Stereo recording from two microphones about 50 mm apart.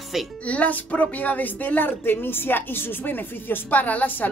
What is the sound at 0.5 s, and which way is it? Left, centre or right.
Speech, left.